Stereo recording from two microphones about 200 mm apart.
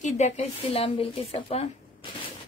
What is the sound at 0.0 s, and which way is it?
A woman's voice, 35° left (ahead or behind).